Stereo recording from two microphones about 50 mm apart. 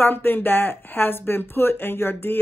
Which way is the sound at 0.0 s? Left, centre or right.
Left.